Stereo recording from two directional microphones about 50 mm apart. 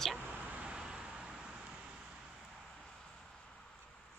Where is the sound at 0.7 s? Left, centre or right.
Centre.